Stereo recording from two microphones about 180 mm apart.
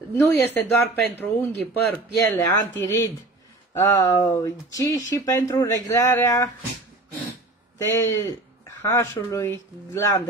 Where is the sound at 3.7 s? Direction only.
15° left (ahead or behind).